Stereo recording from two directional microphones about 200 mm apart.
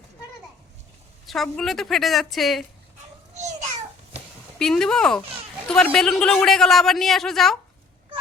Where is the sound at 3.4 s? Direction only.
35° right (ahead or behind).